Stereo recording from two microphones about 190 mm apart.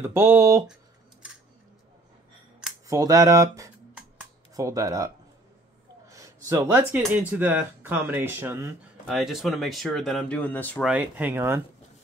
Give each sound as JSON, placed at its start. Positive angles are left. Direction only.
{"t": 0.0, "sound": "speech", "side_deg": -15}
{"t": 2.9, "sound": "speech", "side_deg": -15}
{"t": 9.0, "sound": "speech", "side_deg": 0}
{"t": 10.9, "sound": "speech", "side_deg": -10}